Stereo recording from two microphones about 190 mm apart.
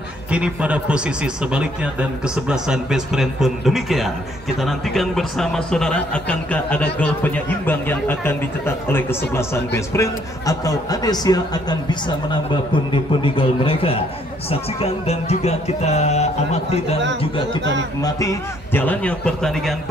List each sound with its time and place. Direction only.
0.3 s a man's voice: 5° right (ahead or behind); by 16.3 s 35° left (ahead or behind)
18.0 s speech: 15° left (ahead or behind)